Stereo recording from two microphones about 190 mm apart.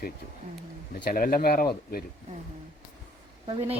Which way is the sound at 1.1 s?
50° left (ahead or behind).